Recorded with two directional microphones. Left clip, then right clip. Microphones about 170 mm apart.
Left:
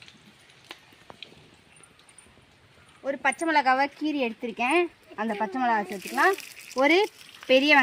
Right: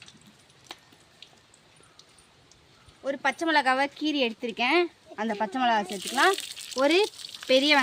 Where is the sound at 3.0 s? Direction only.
Centre (ahead or behind); by 4.9 s 20° left (ahead or behind).